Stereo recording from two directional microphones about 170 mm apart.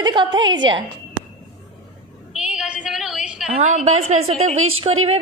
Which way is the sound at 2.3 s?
5° right (ahead or behind).